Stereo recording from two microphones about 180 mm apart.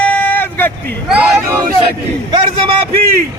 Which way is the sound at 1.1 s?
10° right (ahead or behind).